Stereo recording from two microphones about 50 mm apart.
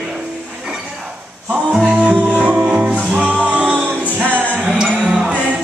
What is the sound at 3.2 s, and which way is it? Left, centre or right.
Music, left.